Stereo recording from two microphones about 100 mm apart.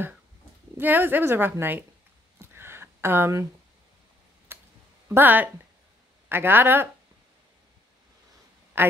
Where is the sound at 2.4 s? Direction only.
25° right (ahead or behind).